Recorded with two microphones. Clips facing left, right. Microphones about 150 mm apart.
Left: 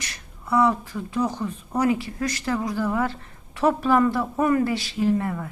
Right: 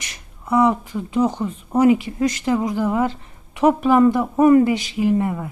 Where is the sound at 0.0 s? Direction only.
20° right (ahead or behind).